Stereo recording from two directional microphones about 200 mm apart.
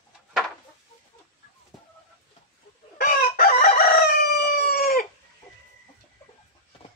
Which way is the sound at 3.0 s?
50° left (ahead or behind).